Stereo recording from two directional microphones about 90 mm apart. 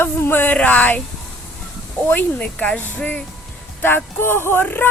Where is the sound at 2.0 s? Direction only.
15° left (ahead or behind).